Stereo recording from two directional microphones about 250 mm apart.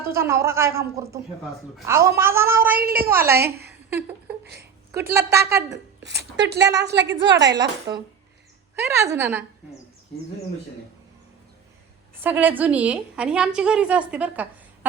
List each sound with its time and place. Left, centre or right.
0.0 s speech: centre
3.3 s a woman's voice: right
3.8 s speech: centre
6.0 s a woman's voice: right
8.9 s speech: centre
12.2 s a woman's voice: centre